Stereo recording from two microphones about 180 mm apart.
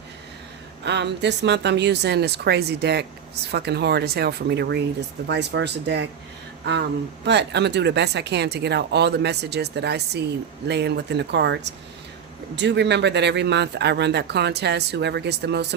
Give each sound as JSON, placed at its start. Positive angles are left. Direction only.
{"t": 0.9, "sound": "speech", "side_deg": -70}
{"t": 7.3, "sound": "speech", "side_deg": -70}